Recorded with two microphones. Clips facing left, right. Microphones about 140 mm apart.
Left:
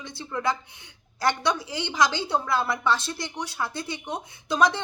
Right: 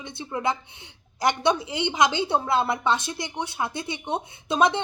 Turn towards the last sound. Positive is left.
turn(degrees=-25)  # may be behind; listen again after turning